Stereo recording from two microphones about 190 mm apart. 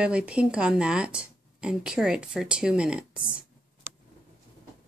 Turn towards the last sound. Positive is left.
turn(degrees=-5)  # may be behind; listen again after turning